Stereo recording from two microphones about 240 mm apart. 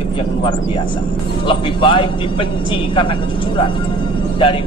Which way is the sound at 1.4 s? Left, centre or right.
Left.